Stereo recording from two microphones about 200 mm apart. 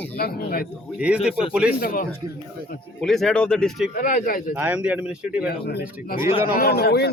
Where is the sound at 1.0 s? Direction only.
5° right (ahead or behind).